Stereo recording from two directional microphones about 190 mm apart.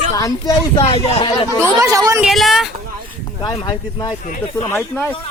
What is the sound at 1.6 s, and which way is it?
Speech, 15° right (ahead or behind).